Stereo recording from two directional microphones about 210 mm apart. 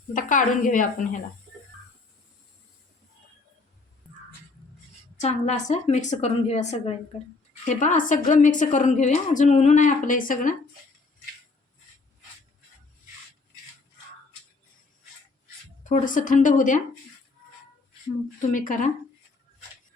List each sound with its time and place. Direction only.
0.1 s a woman's voice: 40° left (ahead or behind)
5.2 s a woman's voice: 35° left (ahead or behind)
15.8 s a woman's voice: 35° left (ahead or behind)
18.5 s a woman's voice: 40° left (ahead or behind)